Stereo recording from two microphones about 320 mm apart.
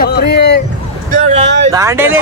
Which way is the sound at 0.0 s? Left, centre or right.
Left.